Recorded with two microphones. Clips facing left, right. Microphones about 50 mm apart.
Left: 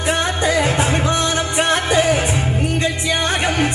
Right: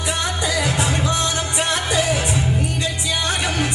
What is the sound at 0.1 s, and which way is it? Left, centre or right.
Music, left.